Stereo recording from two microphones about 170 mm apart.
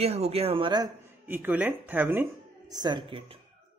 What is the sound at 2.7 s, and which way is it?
Speech, 25° right (ahead or behind).